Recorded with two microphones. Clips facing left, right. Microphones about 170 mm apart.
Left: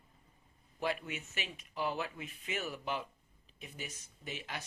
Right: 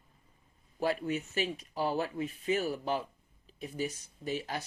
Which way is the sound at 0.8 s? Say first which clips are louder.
Right 6 dB; 35° right (ahead or behind).